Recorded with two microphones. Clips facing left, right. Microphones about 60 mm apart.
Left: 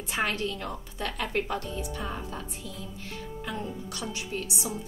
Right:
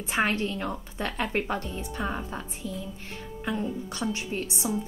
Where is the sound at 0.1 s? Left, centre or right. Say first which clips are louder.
Right 3 dB; right.